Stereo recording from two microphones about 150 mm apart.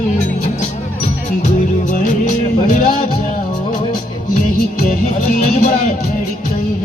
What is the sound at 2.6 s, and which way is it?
Music, 60° left (ahead or behind).